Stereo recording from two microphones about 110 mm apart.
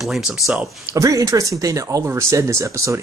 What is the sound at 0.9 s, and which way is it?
Speech, 30° right (ahead or behind).